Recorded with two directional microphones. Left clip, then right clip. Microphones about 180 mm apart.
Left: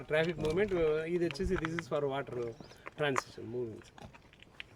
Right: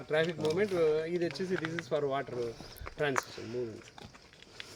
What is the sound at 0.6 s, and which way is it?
Speech, 40° left (ahead or behind).